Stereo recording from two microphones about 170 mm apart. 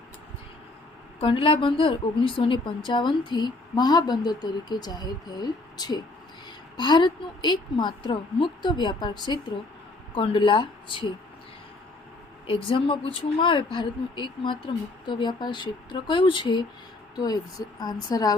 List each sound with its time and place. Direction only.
1.2 s a woman's voice: 30° left (ahead or behind)
12.5 s a woman's voice: 30° left (ahead or behind)